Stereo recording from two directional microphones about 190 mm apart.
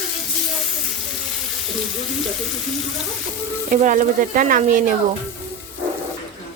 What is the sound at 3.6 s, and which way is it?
Speech, 40° right (ahead or behind).